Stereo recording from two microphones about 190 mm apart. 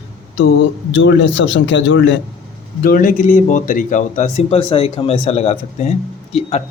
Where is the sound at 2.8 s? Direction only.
45° left (ahead or behind).